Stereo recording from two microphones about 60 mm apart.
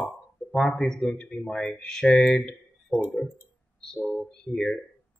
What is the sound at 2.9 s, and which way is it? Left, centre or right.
Speech, left.